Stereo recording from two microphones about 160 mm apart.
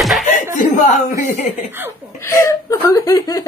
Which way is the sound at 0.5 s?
50° left (ahead or behind).